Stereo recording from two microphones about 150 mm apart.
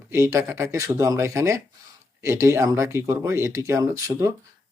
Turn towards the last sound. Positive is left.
turn(degrees=-20)  # may be behind; listen again after turning